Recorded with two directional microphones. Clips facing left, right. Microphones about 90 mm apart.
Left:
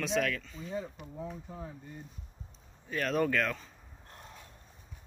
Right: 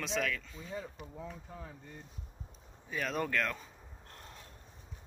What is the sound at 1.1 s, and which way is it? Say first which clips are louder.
Speech: left 6 dB; 15° left (ahead or behind).